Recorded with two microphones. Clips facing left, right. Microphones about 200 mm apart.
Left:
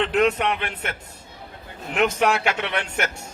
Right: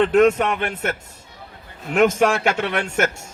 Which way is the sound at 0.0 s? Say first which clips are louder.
Right 5 dB; 45° right (ahead or behind).